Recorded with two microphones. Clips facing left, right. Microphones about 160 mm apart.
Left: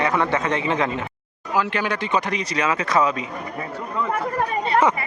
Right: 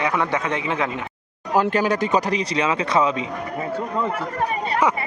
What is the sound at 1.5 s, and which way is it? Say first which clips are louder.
Speech: right 4 dB; 45° right (ahead or behind).